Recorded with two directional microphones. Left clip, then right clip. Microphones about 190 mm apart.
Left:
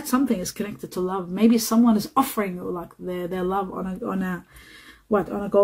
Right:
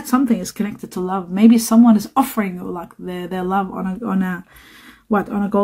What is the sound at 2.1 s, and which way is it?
Speech, 30° right (ahead or behind).